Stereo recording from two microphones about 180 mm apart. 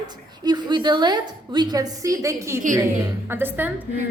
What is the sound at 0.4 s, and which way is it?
A woman's voice, 25° right (ahead or behind).